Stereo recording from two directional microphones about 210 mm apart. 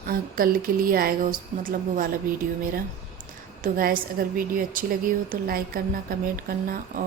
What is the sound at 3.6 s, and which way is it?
Speech, 40° right (ahead or behind).